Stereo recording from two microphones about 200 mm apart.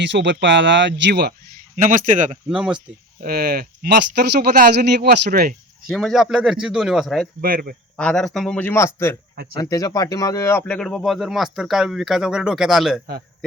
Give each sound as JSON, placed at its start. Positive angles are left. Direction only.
{"t": 0.0, "sound": "speech", "side_deg": -65}
{"t": 1.7, "sound": "speech", "side_deg": -40}
{"t": 2.5, "sound": "speech", "side_deg": -5}
{"t": 3.2, "sound": "speech", "side_deg": -50}
{"t": 5.9, "sound": "speech", "side_deg": 0}
{"t": 7.4, "sound": "speech", "side_deg": -45}
{"t": 7.9, "sound": "speech", "side_deg": 5}